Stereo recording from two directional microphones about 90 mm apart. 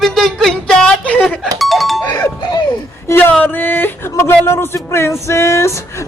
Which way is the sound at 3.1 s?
25° left (ahead or behind).